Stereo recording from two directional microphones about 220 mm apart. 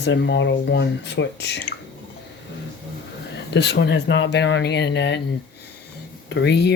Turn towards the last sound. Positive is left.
turn(degrees=50)  # may be behind; listen again after turning